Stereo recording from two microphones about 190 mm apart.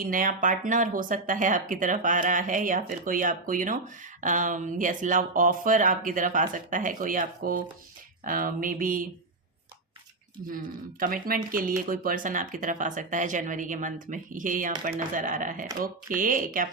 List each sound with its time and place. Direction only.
0.0 s speech: 45° right (ahead or behind)
10.3 s speech: 45° right (ahead or behind)